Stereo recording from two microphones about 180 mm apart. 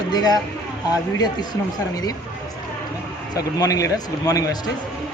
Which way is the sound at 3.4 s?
20° left (ahead or behind).